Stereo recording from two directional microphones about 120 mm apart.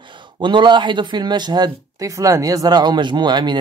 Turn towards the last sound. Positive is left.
turn(degrees=-40)  # may be behind; listen again after turning